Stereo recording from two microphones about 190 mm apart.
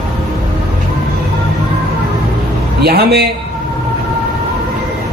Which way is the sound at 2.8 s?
55° right (ahead or behind).